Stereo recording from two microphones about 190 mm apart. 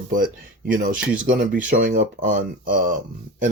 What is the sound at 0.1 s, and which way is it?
Speech, 45° right (ahead or behind).